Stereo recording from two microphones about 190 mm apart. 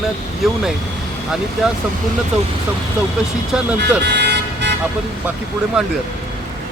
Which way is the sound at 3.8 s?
60° right (ahead or behind).